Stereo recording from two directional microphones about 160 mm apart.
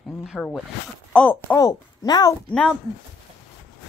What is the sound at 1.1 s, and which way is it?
Speech, 10° left (ahead or behind).